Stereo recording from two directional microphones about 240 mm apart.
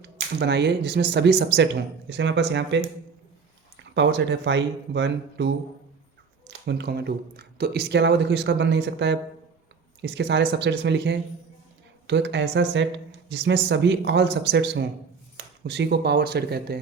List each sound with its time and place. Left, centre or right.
0.0 s speech: right
3.9 s speech: right
6.7 s speech: right